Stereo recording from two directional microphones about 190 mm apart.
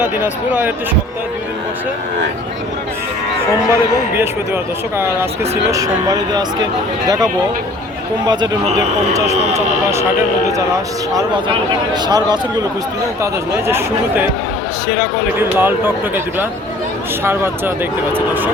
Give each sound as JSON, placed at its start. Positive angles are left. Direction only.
{"t": 0.0, "sound": "speech", "side_deg": -10}
{"t": 3.7, "sound": "speech", "side_deg": -10}
{"t": 9.1, "sound": "speech", "side_deg": -15}
{"t": 11.1, "sound": "speech", "side_deg": -20}
{"t": 13.7, "sound": "speech", "side_deg": -10}
{"t": 15.4, "sound": "speech", "side_deg": -10}